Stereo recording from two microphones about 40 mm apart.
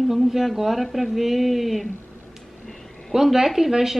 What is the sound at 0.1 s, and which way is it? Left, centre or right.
Speech, centre.